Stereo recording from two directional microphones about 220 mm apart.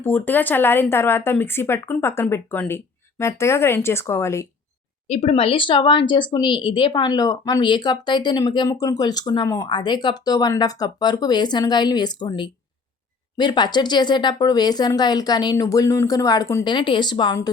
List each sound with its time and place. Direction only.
0.0 s speech: 10° left (ahead or behind)
5.0 s a woman's voice: 30° left (ahead or behind)